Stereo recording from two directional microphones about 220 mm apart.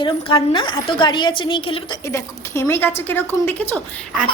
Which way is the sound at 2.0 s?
10° left (ahead or behind).